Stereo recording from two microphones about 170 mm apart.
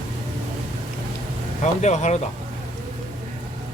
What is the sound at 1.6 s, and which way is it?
Speech, 45° left (ahead or behind).